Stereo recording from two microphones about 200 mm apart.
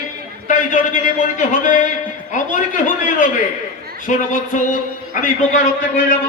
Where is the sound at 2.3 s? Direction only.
40° left (ahead or behind).